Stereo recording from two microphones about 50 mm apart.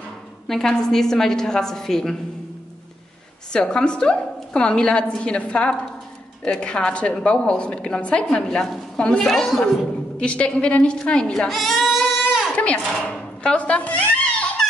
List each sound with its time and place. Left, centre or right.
0.5 s a woman's voice: centre
3.5 s a woman's voice: centre
9.3 s a woman's voice: centre
10.1 s a woman's voice: left
11.3 s speech: centre
12.3 s a sound: centre
12.5 s a sound: left
13.0 s speech: left